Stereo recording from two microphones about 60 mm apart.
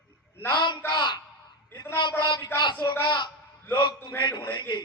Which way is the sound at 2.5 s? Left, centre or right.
Left.